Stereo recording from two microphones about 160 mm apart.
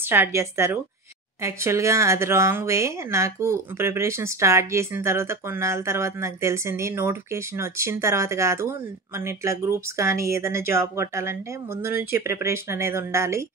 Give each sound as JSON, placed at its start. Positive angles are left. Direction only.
{"t": 0.1, "sound": "speech", "side_deg": -15}